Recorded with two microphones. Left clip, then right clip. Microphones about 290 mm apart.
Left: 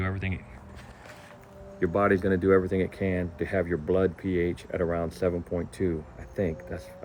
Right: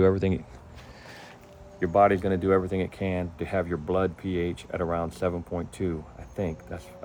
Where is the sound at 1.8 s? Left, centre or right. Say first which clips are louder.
Right 3 dB; centre.